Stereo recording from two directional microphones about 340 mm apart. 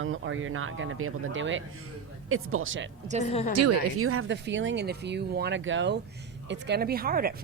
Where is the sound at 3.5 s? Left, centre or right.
Right.